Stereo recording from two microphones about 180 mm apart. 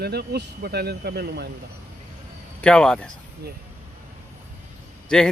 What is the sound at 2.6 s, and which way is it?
Speech, 5° left (ahead or behind).